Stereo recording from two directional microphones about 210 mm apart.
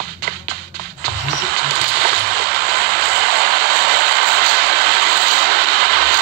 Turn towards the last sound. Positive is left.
turn(degrees=-50)  # may be behind; listen again after turning